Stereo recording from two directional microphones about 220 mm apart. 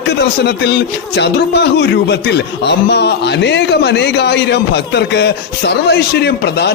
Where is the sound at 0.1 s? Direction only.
50° left (ahead or behind).